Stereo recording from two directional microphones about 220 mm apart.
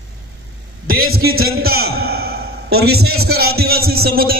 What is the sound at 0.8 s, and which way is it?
A man's voice, 40° right (ahead or behind).